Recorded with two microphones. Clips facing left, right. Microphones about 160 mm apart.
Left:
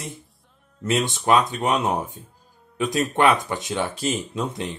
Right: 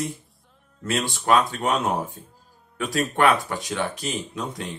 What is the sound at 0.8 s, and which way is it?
Speech, 20° left (ahead or behind).